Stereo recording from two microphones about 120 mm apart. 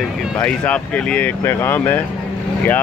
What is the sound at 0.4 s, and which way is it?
Speech, 10° left (ahead or behind).